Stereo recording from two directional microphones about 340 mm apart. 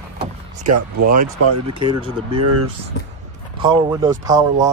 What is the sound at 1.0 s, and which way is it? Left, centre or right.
Speech, right.